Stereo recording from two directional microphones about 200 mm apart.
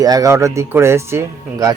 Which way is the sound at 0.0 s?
15° right (ahead or behind).